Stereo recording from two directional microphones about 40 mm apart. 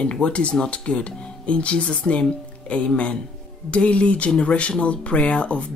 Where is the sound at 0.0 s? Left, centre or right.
Left.